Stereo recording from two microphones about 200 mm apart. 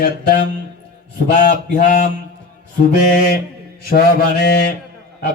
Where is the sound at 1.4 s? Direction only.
40° left (ahead or behind).